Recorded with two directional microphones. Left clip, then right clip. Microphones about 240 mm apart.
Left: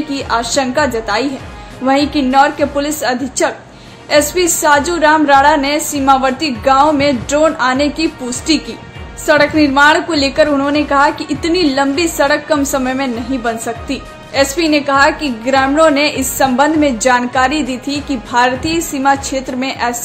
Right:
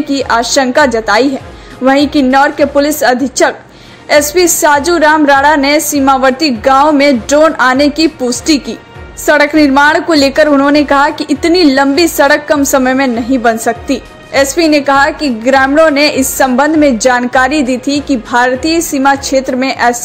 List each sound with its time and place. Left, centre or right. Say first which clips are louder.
0.1 s a woman's voice: right 6 dB; right